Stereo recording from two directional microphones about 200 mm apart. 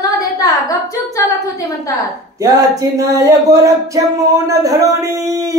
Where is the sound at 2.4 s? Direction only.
20° right (ahead or behind).